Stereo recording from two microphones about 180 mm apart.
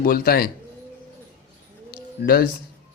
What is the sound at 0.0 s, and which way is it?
Speech, 55° left (ahead or behind).